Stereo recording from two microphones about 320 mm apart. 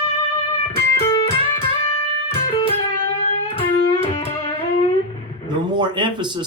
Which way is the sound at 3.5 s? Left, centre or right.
Centre.